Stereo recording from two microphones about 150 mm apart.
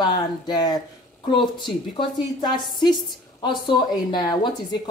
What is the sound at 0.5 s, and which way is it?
A woman's voice, 30° left (ahead or behind).